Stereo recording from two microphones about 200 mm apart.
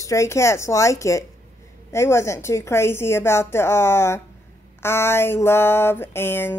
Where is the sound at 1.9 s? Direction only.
15° left (ahead or behind).